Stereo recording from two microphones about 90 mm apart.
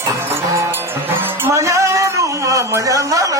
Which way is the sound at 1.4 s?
35° right (ahead or behind).